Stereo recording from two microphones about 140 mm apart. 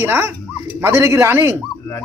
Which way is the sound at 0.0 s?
15° right (ahead or behind).